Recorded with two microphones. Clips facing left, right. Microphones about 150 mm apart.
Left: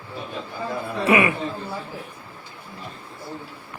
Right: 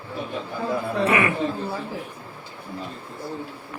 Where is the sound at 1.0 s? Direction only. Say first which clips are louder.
Left 3 dB; 20° left (ahead or behind).